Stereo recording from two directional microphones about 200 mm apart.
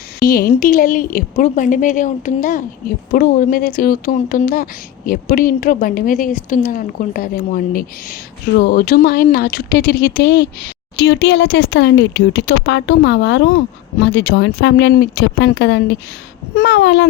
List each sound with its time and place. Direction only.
0.2 s speech: 45° left (ahead or behind)